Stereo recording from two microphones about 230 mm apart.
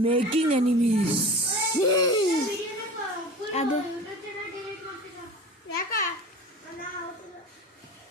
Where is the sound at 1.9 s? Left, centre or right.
Centre.